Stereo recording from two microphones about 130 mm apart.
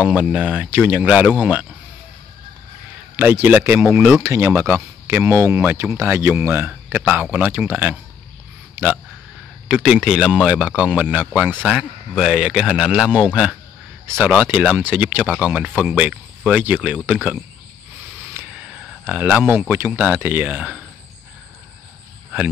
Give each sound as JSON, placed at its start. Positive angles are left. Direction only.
{"t": 0.0, "sound": "speech", "side_deg": -10}
{"t": 3.2, "sound": "speech", "side_deg": -15}
{"t": 18.3, "sound": "a sound", "side_deg": -10}
{"t": 19.7, "sound": "speech", "side_deg": -15}